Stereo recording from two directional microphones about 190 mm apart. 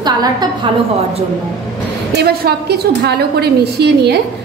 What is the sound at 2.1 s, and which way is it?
A woman's voice, 55° right (ahead or behind).